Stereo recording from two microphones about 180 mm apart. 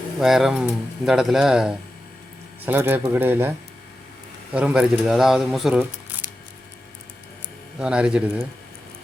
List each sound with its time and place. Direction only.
0.2 s speech: centre (ahead or behind)
4.5 s speech: 5° right (ahead or behind)
7.8 s speech: 5° right (ahead or behind)